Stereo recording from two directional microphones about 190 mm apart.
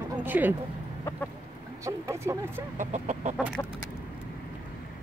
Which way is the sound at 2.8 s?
40° right (ahead or behind).